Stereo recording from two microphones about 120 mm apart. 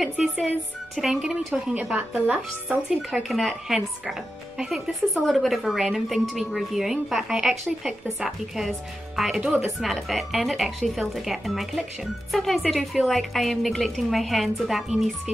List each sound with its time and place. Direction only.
0.0 s speech: centre (ahead or behind)
3.1 s speech: centre (ahead or behind)